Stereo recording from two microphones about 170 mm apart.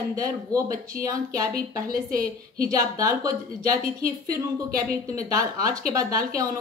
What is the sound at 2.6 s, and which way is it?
A woman's voice, 20° right (ahead or behind).